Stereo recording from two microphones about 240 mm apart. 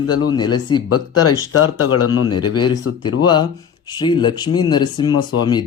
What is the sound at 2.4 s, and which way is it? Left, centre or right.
Speech, centre.